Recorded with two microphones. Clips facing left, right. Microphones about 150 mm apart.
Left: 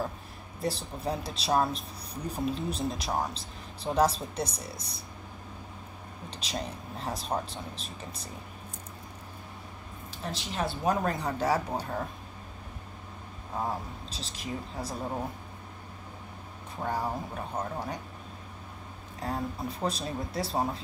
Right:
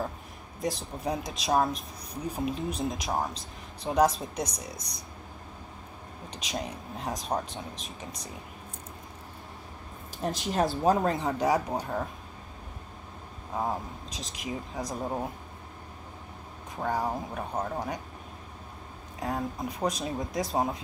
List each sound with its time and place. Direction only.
0.6 s speech: 15° right (ahead or behind)
6.3 s speech: 15° right (ahead or behind)
10.1 s speech: 45° right (ahead or behind)
11.0 s speech: 20° right (ahead or behind)
13.7 s speech: 20° right (ahead or behind)
16.8 s speech: 15° right (ahead or behind)
19.1 s speech: 20° right (ahead or behind)